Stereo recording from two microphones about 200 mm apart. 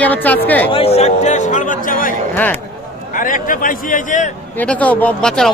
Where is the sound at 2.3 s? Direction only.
10° left (ahead or behind).